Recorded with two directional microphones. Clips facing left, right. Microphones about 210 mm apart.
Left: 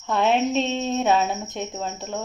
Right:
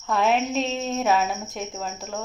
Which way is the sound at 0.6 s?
25° left (ahead or behind).